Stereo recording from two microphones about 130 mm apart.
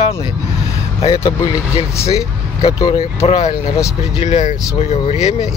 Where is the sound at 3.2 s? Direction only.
55° left (ahead or behind).